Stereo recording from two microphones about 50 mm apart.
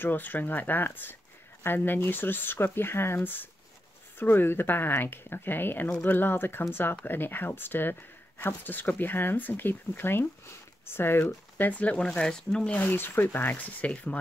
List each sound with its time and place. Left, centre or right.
0.0 s speech: left
4.2 s speech: left; by 12.7 s centre
12.7 s speech: left